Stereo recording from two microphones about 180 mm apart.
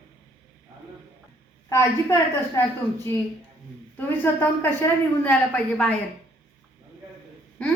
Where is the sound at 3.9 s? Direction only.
10° left (ahead or behind).